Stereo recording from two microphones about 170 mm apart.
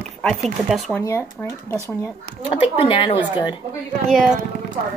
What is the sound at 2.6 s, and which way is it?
Speech, 30° left (ahead or behind).